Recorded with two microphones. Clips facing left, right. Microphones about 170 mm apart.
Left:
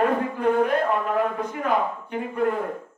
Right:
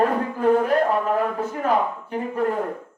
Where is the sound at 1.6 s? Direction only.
35° right (ahead or behind).